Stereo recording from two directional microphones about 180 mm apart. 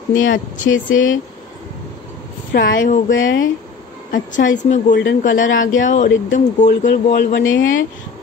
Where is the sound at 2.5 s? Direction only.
60° left (ahead or behind).